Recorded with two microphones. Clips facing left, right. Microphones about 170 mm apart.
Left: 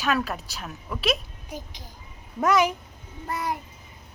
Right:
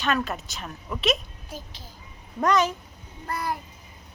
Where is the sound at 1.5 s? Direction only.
15° left (ahead or behind).